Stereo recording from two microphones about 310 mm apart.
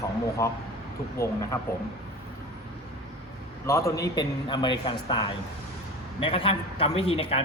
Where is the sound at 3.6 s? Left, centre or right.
Centre.